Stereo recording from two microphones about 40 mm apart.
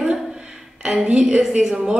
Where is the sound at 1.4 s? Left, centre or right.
Centre.